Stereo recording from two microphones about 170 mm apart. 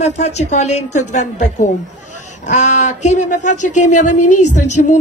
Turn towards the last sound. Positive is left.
turn(degrees=45)  # may be behind; listen again after turning